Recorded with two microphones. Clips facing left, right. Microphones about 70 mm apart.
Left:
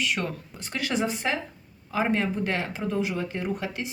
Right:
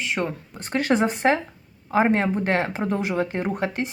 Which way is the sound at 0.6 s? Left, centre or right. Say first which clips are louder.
Right 7 dB; right.